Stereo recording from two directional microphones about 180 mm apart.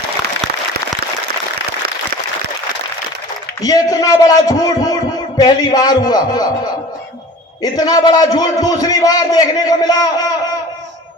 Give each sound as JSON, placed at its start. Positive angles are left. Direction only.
{"t": 3.6, "sound": "a man's voice", "side_deg": 20}
{"t": 7.6, "sound": "a man's voice", "side_deg": 20}